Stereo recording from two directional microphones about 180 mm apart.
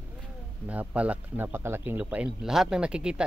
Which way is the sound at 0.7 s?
5° right (ahead or behind).